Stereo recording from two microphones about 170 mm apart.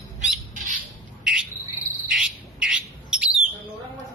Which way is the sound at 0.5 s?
50° right (ahead or behind).